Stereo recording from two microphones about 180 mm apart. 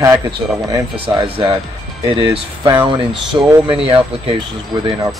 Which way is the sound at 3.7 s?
30° right (ahead or behind).